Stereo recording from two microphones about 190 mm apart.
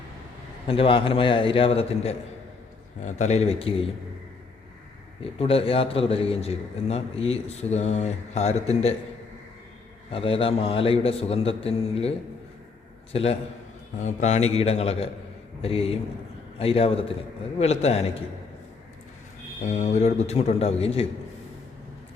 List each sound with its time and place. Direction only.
0.7 s a man's voice: 30° left (ahead or behind)
5.2 s a man's voice: 30° left (ahead or behind)
10.1 s a man's voice: 30° left (ahead or behind)
13.1 s a man's voice: 30° left (ahead or behind)
19.6 s a man's voice: 40° left (ahead or behind)